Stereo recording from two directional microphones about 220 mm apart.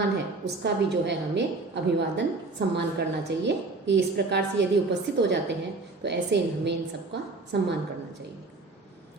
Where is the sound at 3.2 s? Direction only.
55° right (ahead or behind).